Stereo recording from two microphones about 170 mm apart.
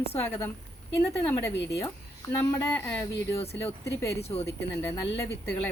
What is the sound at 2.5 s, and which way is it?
Speech, 20° left (ahead or behind).